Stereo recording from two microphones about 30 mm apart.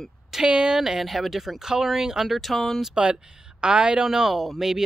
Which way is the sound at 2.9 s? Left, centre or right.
Right.